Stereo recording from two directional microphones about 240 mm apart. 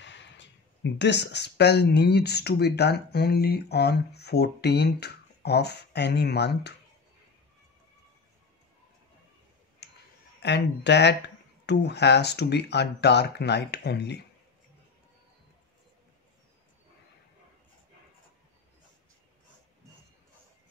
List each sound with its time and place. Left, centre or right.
0.0 s speech: left
9.8 s clicking: left
10.4 s speech: left